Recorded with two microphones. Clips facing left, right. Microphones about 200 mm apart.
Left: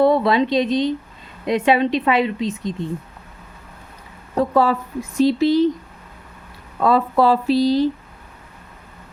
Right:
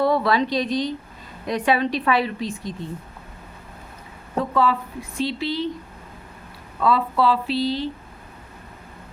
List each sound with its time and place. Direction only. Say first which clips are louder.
0.0 s a woman's voice: left 4 dB; 25° left (ahead or behind)
4.4 s a woman's voice: left 4 dB; 40° left (ahead or behind)
6.7 s a woman's voice: left 4 dB; 45° left (ahead or behind)